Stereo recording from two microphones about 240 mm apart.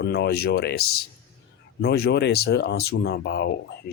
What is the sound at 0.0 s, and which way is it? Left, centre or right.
Speech, left.